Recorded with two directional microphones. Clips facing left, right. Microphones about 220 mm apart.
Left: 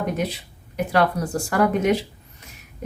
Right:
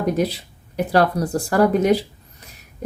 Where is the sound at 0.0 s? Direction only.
35° right (ahead or behind).